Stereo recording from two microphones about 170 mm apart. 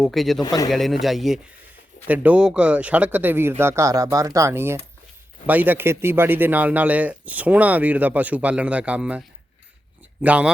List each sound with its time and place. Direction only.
0.0 s a man's voice: centre (ahead or behind)
0.4 s speech: 20° left (ahead or behind)
0.7 s a man's voice: centre (ahead or behind)